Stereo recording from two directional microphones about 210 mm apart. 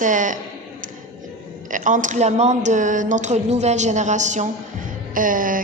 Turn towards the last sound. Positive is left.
turn(degrees=-40)  # may be behind; listen again after turning